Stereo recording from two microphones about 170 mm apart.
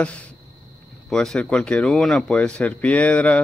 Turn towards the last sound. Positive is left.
turn(degrees=10)  # may be behind; listen again after turning